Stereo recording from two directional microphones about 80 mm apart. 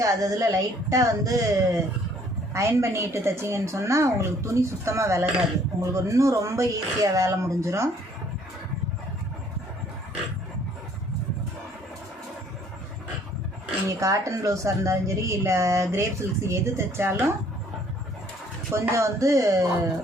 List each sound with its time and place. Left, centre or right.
0.0 s a woman's voice: right
13.8 s a woman's voice: right
18.7 s a woman's voice: right